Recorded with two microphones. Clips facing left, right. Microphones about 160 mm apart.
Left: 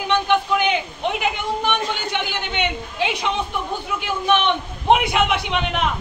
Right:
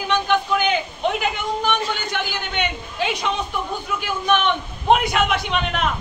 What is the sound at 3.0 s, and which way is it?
Speech, 25° left (ahead or behind).